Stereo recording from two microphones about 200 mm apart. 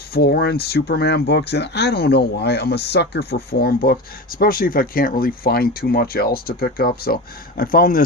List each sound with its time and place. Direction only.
0.1 s speech: 50° left (ahead or behind)